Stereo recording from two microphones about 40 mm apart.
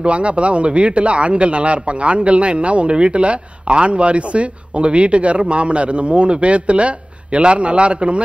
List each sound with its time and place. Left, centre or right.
0.0 s a man's voice: right